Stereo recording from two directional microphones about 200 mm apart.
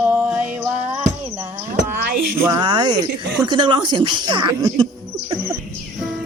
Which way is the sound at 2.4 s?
20° right (ahead or behind).